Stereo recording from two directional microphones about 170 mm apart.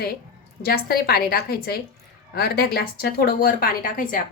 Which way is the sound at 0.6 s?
65° left (ahead or behind).